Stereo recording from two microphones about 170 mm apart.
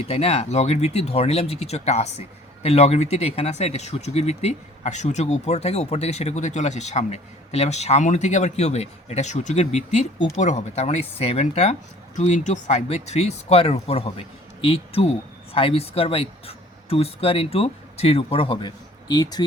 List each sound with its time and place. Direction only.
0.0 s speech: 40° left (ahead or behind)